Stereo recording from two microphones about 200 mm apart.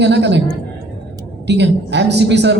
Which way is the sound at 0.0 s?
60° right (ahead or behind).